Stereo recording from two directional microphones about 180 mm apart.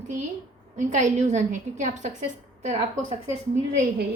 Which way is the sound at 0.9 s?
40° right (ahead or behind).